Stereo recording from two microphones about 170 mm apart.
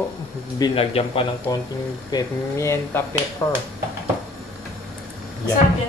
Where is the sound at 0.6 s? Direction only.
35° left (ahead or behind).